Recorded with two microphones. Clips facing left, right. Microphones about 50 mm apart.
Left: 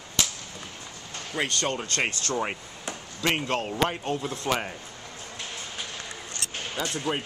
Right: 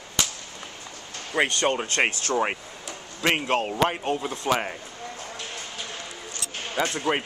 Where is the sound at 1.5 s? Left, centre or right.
Centre.